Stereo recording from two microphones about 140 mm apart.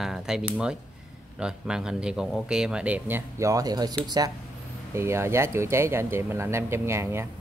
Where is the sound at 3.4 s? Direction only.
25° right (ahead or behind).